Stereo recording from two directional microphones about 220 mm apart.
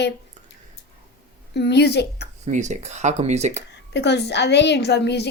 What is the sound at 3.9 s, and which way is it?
A child's voice, 50° left (ahead or behind).